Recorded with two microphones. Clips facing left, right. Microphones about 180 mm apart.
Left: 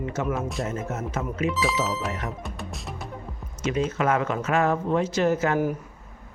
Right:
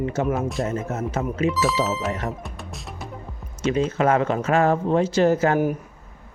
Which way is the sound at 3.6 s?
30° right (ahead or behind).